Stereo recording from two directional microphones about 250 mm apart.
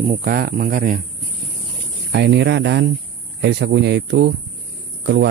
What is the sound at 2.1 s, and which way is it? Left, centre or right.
Speech, right.